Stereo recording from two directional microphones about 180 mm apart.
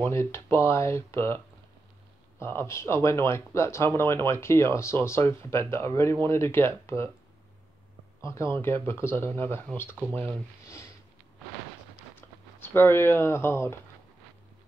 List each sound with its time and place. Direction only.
0.0 s speech: 15° left (ahead or behind)
2.4 s speech: 15° left (ahead or behind)
8.2 s speech: 15° left (ahead or behind)
12.2 s speech: 10° left (ahead or behind)